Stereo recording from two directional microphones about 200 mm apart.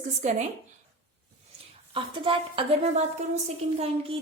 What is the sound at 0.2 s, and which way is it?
Speech, 35° right (ahead or behind).